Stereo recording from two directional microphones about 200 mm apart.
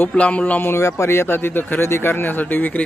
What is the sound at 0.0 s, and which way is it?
Speech, 5° left (ahead or behind).